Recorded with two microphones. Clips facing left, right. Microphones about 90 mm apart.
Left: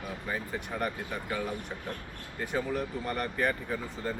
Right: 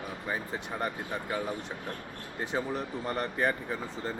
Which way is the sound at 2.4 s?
25° right (ahead or behind).